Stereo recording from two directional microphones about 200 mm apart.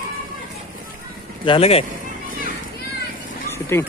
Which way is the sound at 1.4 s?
25° left (ahead or behind).